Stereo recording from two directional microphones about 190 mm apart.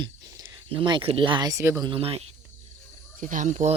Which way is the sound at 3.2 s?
45° right (ahead or behind).